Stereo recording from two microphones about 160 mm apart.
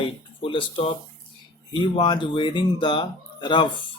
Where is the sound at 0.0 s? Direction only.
35° left (ahead or behind).